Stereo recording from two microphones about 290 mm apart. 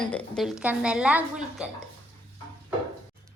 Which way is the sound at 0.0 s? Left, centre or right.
Centre.